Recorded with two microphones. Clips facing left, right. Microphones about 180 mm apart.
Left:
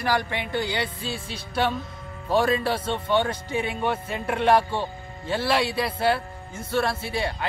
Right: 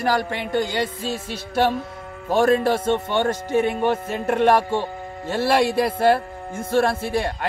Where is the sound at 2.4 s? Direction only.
50° right (ahead or behind).